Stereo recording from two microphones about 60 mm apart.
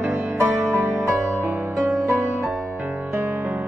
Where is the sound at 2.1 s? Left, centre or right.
Right.